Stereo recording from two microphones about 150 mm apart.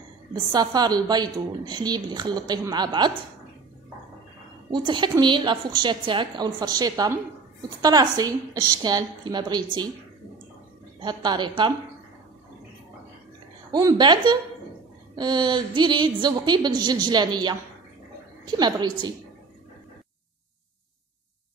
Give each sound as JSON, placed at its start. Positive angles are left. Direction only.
{"t": 0.3, "sound": "a woman's voice", "side_deg": -25}
{"t": 4.6, "sound": "a woman's voice", "side_deg": -30}
{"t": 11.0, "sound": "a woman's voice", "side_deg": -30}
{"t": 13.7, "sound": "a woman's voice", "side_deg": -25}
{"t": 18.6, "sound": "a woman's voice", "side_deg": -30}